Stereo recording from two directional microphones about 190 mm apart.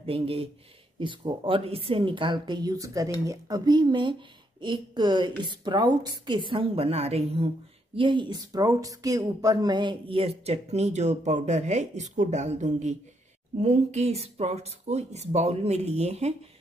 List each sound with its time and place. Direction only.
0.0 s a woman's voice: 30° right (ahead or behind)